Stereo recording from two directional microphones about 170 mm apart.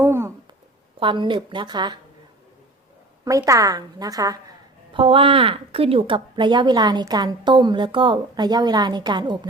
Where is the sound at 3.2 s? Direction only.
20° right (ahead or behind).